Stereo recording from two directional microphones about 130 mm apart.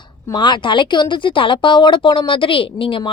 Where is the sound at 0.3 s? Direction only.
35° left (ahead or behind).